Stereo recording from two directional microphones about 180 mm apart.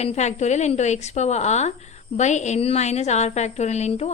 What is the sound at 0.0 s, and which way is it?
A woman's voice, 40° left (ahead or behind).